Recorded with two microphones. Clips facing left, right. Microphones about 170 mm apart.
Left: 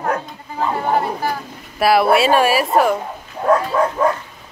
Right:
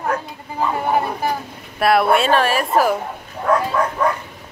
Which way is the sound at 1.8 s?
5° left (ahead or behind).